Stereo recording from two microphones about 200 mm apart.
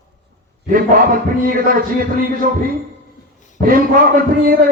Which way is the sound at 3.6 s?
45° right (ahead or behind).